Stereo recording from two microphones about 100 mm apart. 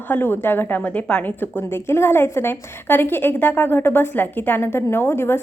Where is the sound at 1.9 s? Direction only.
25° left (ahead or behind).